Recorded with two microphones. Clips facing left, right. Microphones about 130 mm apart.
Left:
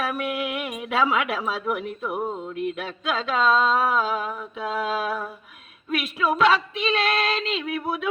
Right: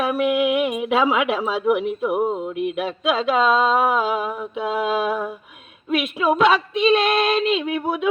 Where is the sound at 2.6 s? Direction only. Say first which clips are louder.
Right 5 dB; 15° right (ahead or behind).